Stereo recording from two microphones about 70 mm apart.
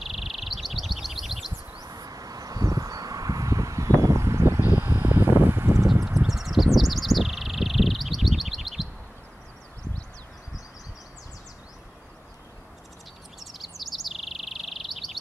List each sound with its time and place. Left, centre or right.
0.0 s bird: centre
1.8 s a sound: right
6.1 s bird: centre
13.4 s chirp: centre